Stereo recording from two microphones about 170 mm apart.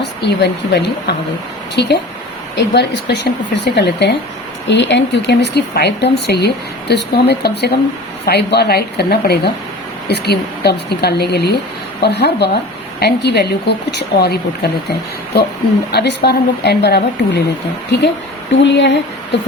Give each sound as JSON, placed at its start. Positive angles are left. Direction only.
{"t": 0.0, "sound": "a woman's voice", "side_deg": 80}
{"t": 1.7, "sound": "a woman's voice", "side_deg": 90}
{"t": 18.6, "sound": "a woman's voice", "side_deg": 90}